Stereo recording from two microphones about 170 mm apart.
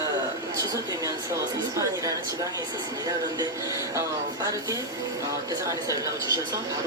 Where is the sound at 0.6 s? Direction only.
20° right (ahead or behind).